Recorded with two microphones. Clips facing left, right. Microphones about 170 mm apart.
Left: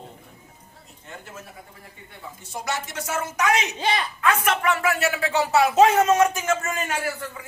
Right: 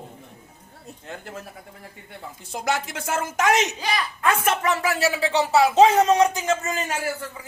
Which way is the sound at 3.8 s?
25° left (ahead or behind).